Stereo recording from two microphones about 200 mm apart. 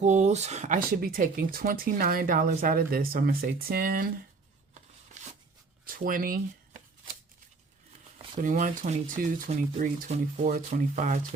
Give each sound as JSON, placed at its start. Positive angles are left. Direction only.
{"t": 0.0, "sound": "speech", "side_deg": -35}
{"t": 5.8, "sound": "speech", "side_deg": -45}
{"t": 8.4, "sound": "speech", "side_deg": -40}